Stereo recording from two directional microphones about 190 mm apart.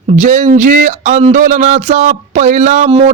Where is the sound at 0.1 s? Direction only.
40° right (ahead or behind).